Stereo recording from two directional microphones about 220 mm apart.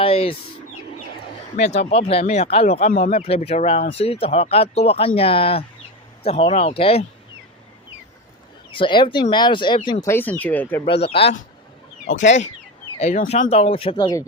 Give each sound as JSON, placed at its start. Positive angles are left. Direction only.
{"t": 0.0, "sound": "bird", "side_deg": 25}
{"t": 1.7, "sound": "speech", "side_deg": 30}
{"t": 8.7, "sound": "speech", "side_deg": 20}
{"t": 10.8, "sound": "speech", "side_deg": 25}
{"t": 12.0, "sound": "speech", "side_deg": 55}
{"t": 13.0, "sound": "speech", "side_deg": 30}